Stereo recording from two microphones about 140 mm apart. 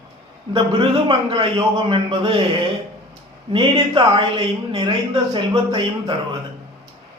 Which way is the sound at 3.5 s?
35° right (ahead or behind).